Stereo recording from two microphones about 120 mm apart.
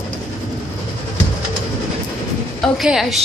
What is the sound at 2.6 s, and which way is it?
Speech, 5° right (ahead or behind).